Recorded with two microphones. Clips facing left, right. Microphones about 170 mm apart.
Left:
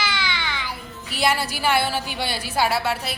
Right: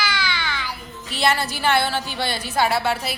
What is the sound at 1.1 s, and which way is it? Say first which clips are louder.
A woman's voice: right 1 dB; 10° left (ahead or behind).